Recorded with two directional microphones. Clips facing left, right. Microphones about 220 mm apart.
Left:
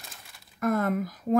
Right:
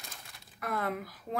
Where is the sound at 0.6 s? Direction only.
45° left (ahead or behind).